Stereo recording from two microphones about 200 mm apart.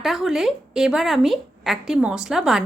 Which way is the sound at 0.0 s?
Centre (ahead or behind).